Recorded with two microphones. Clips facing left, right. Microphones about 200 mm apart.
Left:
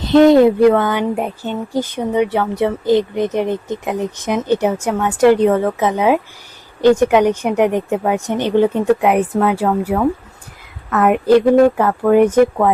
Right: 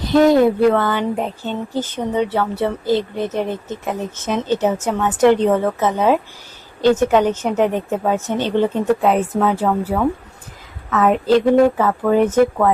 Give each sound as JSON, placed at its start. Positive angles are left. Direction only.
{"t": 0.3, "sound": "speech", "side_deg": 20}